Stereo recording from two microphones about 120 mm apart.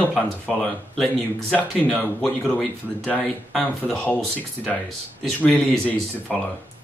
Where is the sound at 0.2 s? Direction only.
5° left (ahead or behind).